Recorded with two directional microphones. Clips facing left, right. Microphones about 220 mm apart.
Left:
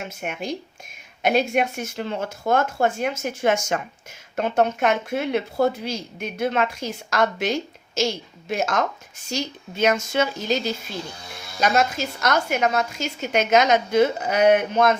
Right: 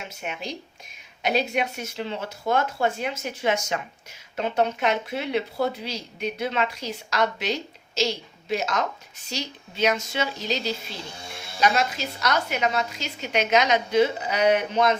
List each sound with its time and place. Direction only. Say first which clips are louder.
0.1 s speech: left 4 dB; 50° left (ahead or behind)